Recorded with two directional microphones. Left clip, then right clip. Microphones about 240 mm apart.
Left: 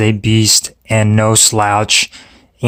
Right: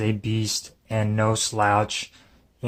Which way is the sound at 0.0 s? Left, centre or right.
Left.